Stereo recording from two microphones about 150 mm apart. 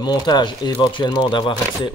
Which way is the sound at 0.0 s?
30° left (ahead or behind).